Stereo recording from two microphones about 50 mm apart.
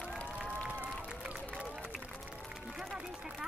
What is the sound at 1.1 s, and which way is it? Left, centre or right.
Run, right.